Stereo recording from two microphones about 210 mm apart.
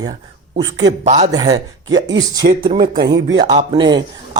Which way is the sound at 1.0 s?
35° right (ahead or behind).